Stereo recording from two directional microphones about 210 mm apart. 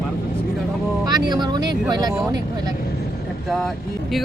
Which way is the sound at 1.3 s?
20° right (ahead or behind).